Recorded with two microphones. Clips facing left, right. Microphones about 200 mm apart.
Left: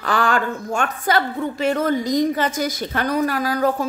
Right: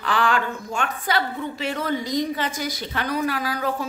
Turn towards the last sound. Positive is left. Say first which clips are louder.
# left 5 dB
turn(degrees=45)  # may be behind; listen again after turning